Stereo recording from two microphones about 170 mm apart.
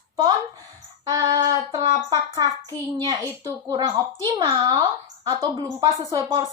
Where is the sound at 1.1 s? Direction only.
20° right (ahead or behind).